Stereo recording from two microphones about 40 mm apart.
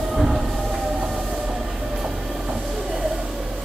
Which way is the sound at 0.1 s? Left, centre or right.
Centre.